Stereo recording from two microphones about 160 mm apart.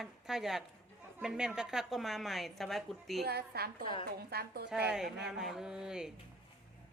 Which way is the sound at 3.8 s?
30° left (ahead or behind).